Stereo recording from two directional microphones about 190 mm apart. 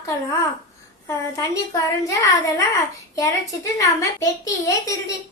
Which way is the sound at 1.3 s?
15° left (ahead or behind).